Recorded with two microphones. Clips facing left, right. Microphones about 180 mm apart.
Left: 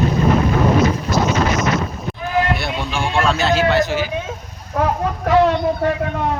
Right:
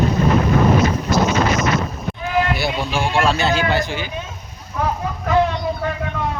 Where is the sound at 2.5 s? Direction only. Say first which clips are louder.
Right 2 dB; centre (ahead or behind).